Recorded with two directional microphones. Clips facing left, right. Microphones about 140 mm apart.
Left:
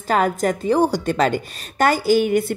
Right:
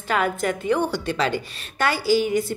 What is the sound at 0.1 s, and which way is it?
A woman's voice, 40° left (ahead or behind).